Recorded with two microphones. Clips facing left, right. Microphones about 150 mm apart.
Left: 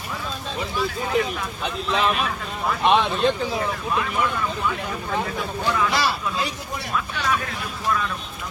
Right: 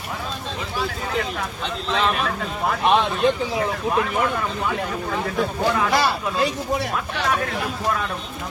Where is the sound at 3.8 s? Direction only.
45° right (ahead or behind).